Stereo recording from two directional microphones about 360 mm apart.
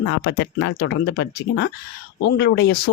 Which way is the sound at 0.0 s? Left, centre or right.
Left.